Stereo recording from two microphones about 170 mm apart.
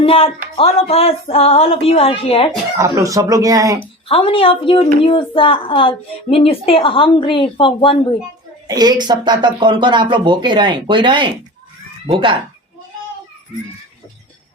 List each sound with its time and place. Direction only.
0.0 s a woman's voice: 35° left (ahead or behind)
2.7 s speech: 20° right (ahead or behind)
4.1 s a woman's voice: 35° left (ahead or behind)
8.6 s speech: 25° right (ahead or behind)